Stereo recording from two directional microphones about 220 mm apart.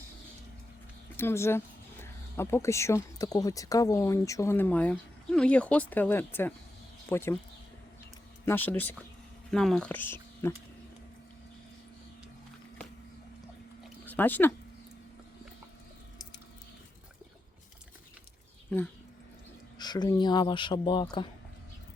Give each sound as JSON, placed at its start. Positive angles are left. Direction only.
{"t": 1.1, "sound": "speech", "side_deg": 10}
{"t": 8.4, "sound": "speech", "side_deg": 10}
{"t": 14.0, "sound": "speech", "side_deg": 10}
{"t": 19.8, "sound": "speech", "side_deg": 20}